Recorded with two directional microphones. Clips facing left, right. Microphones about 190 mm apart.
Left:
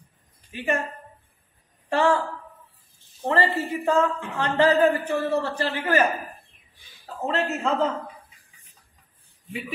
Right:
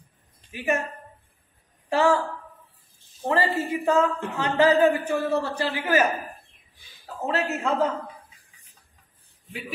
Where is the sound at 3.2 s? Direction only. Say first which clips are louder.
Left 1 dB; 10° right (ahead or behind).